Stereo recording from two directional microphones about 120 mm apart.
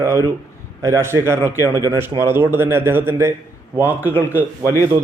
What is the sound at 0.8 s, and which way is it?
A man's voice, 25° right (ahead or behind).